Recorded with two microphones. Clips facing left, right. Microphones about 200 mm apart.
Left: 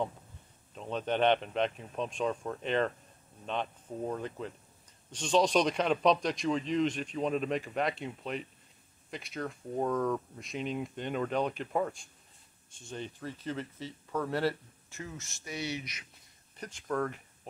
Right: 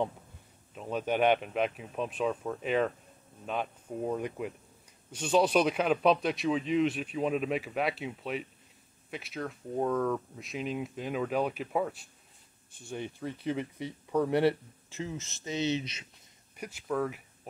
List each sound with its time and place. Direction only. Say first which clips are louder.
0.7 s speech: right 2 dB; 10° right (ahead or behind); by 16.1 s 25° right (ahead or behind)
16.5 s speech: right 1 dB; 10° right (ahead or behind)